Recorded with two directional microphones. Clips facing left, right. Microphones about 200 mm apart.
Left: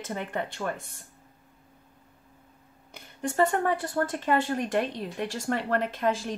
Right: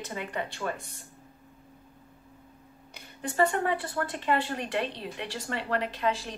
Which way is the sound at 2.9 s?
50° left (ahead or behind).